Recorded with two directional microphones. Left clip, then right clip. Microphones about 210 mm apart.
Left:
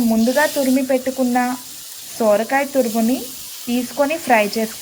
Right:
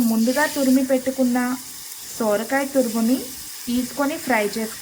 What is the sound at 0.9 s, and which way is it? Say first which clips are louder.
A woman's voice: left 2 dB; 15° left (ahead or behind).